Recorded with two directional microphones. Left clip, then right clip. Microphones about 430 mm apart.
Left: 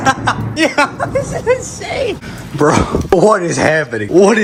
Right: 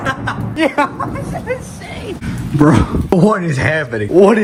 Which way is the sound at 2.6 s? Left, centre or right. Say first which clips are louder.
Left 3 dB; centre.